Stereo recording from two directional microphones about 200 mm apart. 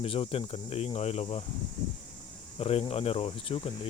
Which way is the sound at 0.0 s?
30° left (ahead or behind).